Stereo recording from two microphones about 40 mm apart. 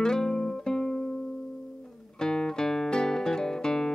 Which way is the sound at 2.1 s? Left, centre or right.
Centre.